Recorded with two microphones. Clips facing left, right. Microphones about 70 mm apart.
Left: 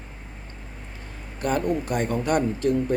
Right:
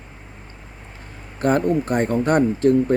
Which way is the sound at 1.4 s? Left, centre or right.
Right.